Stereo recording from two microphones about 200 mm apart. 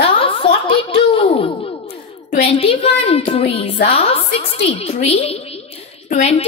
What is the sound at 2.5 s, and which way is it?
A woman's voice, 30° left (ahead or behind).